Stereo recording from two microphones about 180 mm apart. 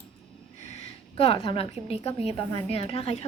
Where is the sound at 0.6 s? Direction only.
35° left (ahead or behind).